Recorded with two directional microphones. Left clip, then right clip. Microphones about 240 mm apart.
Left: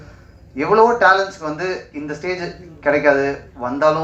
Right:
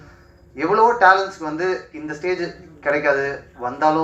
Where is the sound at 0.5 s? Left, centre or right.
Right.